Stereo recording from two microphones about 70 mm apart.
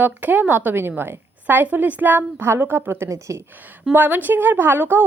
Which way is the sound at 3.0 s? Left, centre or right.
Right.